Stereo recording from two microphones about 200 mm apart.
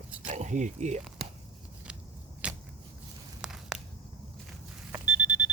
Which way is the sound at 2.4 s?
5° right (ahead or behind).